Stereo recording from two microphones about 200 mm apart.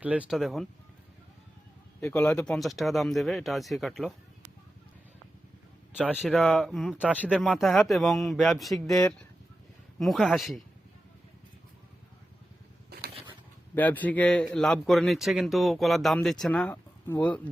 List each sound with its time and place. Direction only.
0.0 s a man's voice: 5° right (ahead or behind)
2.0 s a man's voice: 10° left (ahead or behind)
6.0 s a man's voice: 5° right (ahead or behind)
10.0 s a man's voice: centre (ahead or behind)
12.9 s a sound: 55° right (ahead or behind)
13.7 s a man's voice: 10° left (ahead or behind)